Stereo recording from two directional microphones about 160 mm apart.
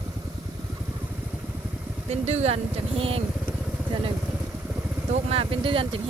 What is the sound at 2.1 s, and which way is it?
Speech, 45° right (ahead or behind).